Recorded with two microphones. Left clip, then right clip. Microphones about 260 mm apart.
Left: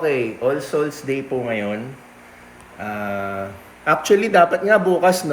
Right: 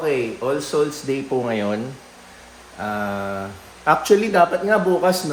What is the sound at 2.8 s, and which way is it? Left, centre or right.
Speech, centre.